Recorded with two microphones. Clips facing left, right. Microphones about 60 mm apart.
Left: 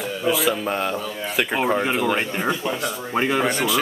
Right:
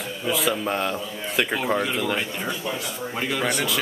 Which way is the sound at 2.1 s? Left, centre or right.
Left.